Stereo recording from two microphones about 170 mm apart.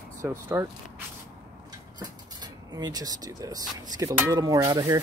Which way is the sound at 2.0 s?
25° right (ahead or behind).